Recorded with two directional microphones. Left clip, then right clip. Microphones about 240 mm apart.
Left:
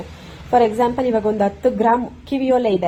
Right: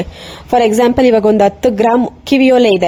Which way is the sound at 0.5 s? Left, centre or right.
Right.